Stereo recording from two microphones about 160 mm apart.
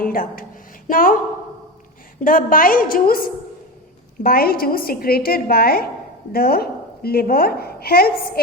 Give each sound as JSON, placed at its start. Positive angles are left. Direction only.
{"t": 0.0, "sound": "a woman's voice", "side_deg": 65}
{"t": 2.2, "sound": "a woman's voice", "side_deg": 60}